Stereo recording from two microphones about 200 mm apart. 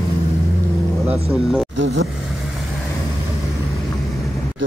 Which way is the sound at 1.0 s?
5° right (ahead or behind).